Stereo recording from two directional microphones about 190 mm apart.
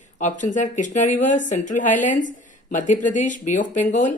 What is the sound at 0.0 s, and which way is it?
A woman's voice, 40° left (ahead or behind).